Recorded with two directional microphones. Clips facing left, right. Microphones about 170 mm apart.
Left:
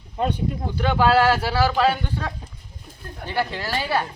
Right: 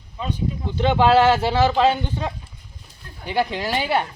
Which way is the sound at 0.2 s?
55° left (ahead or behind).